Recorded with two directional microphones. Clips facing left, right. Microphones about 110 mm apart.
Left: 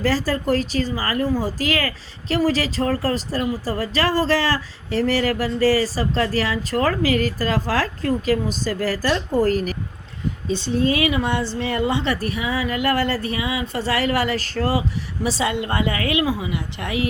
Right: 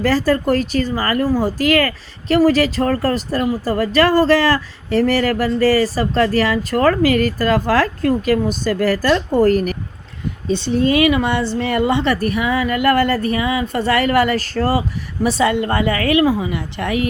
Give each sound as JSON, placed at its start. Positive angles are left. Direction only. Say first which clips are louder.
{"t": 0.0, "sound": "speech", "louder": "right 5 dB", "side_deg": -65}